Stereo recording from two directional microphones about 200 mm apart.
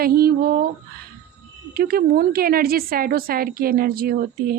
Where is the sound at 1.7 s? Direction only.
50° right (ahead or behind).